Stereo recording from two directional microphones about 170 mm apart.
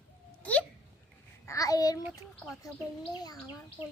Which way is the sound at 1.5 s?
20° left (ahead or behind).